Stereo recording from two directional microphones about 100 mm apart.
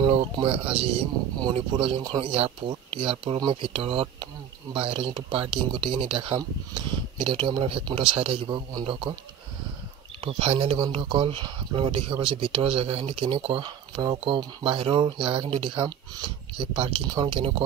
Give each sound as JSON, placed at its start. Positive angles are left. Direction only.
{"t": 0.4, "sound": "speech", "side_deg": -70}
{"t": 2.9, "sound": "speech", "side_deg": -65}
{"t": 8.5, "sound": "speech", "side_deg": -50}
{"t": 8.8, "sound": "speech", "side_deg": -60}
{"t": 10.2, "sound": "speech", "side_deg": -70}
{"t": 10.8, "sound": "speech", "side_deg": -55}
{"t": 14.1, "sound": "speech", "side_deg": -65}
{"t": 17.1, "sound": "speech", "side_deg": -45}
{"t": 17.4, "sound": "speech", "side_deg": -65}